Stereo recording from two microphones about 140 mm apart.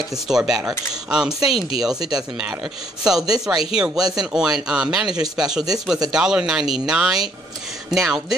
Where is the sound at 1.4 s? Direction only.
45° left (ahead or behind).